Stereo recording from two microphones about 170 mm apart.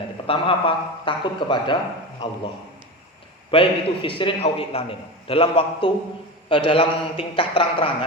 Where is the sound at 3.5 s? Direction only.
30° left (ahead or behind).